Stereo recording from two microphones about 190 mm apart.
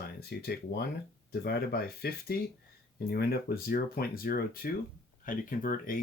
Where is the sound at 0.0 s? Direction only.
55° left (ahead or behind).